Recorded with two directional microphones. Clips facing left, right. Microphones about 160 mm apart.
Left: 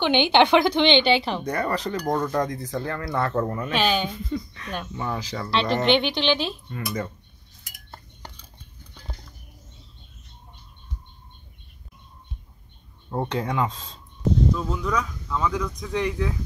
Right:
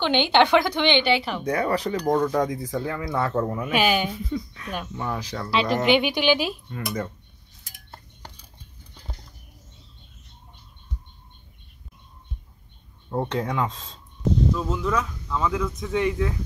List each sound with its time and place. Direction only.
0.0 s a woman's voice: 15° left (ahead or behind)
1.4 s speech: 5° right (ahead or behind)
13.1 s speech: centre (ahead or behind)